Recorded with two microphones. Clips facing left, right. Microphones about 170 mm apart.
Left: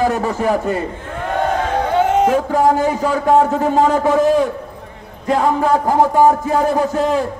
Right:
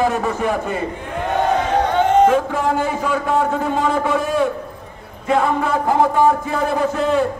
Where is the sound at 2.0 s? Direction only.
5° left (ahead or behind).